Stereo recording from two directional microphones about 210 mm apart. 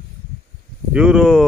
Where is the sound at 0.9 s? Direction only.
5° right (ahead or behind).